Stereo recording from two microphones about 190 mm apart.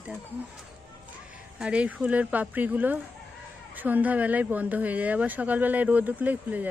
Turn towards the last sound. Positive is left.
turn(degrees=-10)  # may be behind; listen again after turning